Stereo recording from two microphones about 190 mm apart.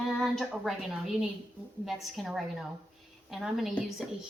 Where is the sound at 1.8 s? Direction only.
Centre (ahead or behind).